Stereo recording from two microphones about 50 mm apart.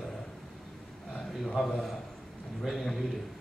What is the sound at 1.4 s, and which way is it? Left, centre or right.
A man's voice, centre.